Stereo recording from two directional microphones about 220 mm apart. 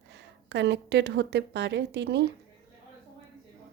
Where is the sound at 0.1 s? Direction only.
55° right (ahead or behind).